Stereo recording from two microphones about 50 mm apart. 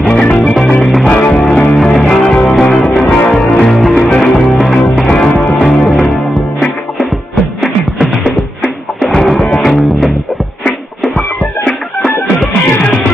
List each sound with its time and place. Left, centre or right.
0.6 s music: centre
1.1 s music: left
9.1 s music: centre
11.1 s music: centre